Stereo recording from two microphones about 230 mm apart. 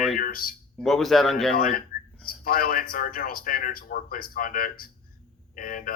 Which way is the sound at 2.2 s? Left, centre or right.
Left.